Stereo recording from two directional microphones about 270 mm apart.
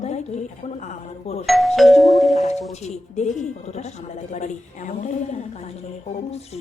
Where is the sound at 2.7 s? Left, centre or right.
Left.